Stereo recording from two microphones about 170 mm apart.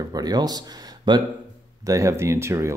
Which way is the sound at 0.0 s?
20° right (ahead or behind).